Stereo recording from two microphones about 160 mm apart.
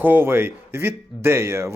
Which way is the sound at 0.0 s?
15° right (ahead or behind).